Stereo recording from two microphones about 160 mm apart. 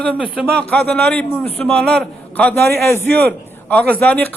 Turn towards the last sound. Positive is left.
turn(degrees=10)  # may be behind; listen again after turning